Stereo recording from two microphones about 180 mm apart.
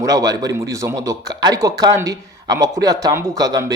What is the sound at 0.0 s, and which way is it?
A man's voice, 20° right (ahead or behind).